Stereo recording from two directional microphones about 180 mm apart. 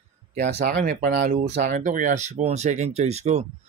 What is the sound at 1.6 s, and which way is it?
Speech, 45° right (ahead or behind).